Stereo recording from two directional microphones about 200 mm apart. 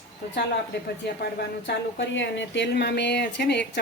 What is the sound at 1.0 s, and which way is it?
Speech, 55° left (ahead or behind).